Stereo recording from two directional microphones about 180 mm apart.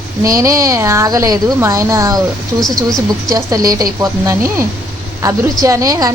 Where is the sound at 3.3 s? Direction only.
20° right (ahead or behind).